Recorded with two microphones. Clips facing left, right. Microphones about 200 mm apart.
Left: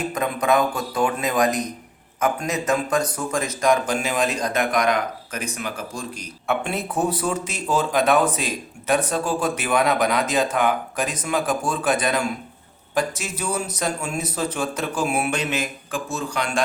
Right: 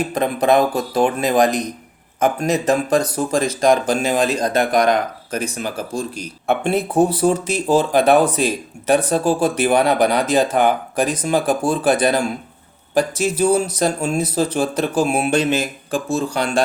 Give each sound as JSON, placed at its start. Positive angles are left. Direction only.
{"t": 0.1, "sound": "speech", "side_deg": -35}